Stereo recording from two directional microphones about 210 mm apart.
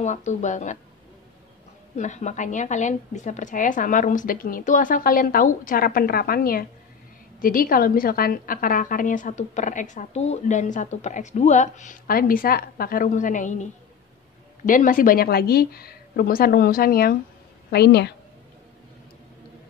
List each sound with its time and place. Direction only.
0.0 s a woman's voice: 35° left (ahead or behind)
2.0 s a woman's voice: 35° left (ahead or behind)
14.7 s a woman's voice: 40° left (ahead or behind)